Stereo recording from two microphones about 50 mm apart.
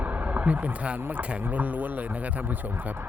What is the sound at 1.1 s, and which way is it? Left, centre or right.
Speech, right.